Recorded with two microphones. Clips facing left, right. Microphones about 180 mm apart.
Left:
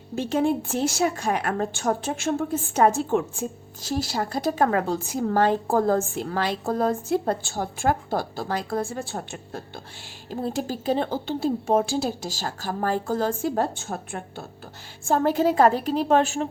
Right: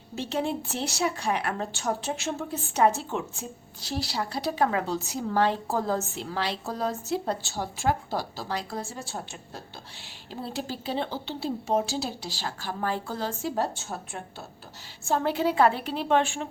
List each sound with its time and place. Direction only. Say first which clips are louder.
0.2 s a woman's voice: left 6 dB; 50° left (ahead or behind)